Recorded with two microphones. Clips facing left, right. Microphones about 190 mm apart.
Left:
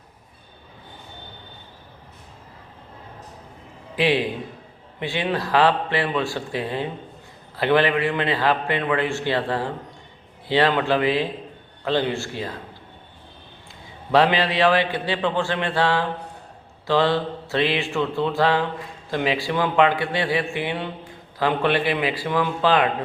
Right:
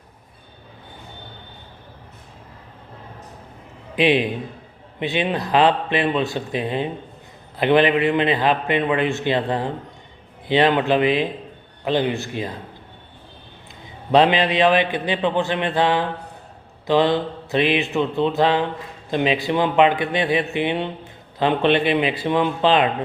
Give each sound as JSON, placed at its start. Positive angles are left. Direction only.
{"t": 3.9, "sound": "a man's voice", "side_deg": -20}
{"t": 14.1, "sound": "a man's voice", "side_deg": -20}